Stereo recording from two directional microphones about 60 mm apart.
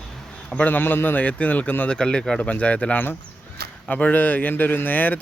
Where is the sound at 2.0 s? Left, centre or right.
Centre.